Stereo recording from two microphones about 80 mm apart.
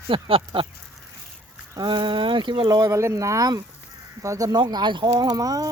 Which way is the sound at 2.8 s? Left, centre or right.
Right.